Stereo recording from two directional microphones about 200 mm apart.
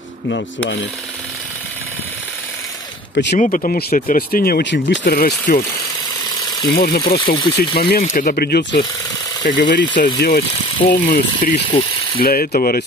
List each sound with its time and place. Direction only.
3.3 s speech: 40° left (ahead or behind); by 5.0 s 65° left (ahead or behind)
5.0 s speech: 50° left (ahead or behind)
6.7 s speech: 50° left (ahead or behind)
9.9 s speech: 50° left (ahead or behind)
10.9 s speech: 35° left (ahead or behind)